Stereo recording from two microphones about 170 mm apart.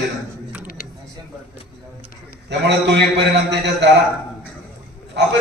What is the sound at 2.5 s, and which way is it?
A man's voice, 90° right.